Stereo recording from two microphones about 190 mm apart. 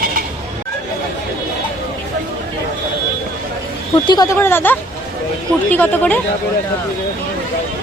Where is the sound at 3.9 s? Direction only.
25° left (ahead or behind); by 6.2 s 10° left (ahead or behind).